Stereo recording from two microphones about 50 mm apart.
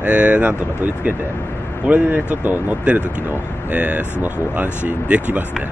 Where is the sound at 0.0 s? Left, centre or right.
Right.